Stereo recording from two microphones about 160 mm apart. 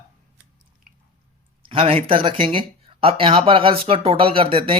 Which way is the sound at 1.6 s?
35° right (ahead or behind).